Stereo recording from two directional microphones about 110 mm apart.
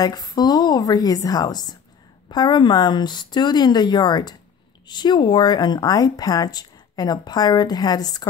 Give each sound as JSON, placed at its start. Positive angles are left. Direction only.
{"t": 0.0, "sound": "speech", "side_deg": 35}